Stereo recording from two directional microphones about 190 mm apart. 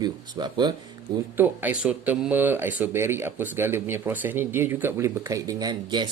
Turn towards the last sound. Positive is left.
turn(degrees=-25)  # may be behind; listen again after turning